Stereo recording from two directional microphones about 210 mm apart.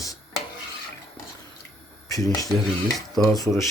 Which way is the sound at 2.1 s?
15° left (ahead or behind).